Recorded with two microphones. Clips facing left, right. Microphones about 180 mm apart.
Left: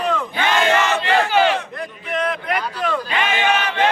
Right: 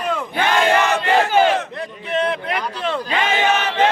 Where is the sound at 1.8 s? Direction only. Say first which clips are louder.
Right 2 dB; 30° right (ahead or behind).